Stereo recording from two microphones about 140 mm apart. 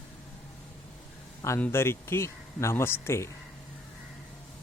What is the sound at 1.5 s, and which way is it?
Speech, 15° left (ahead or behind).